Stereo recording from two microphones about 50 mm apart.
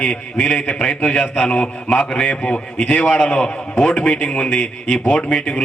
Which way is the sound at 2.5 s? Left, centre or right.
Left.